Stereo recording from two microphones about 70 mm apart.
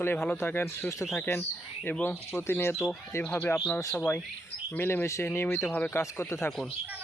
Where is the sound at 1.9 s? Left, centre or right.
Left.